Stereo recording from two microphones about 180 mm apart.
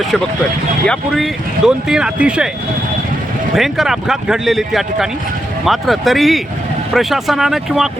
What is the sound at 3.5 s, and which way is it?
Speech, centre (ahead or behind).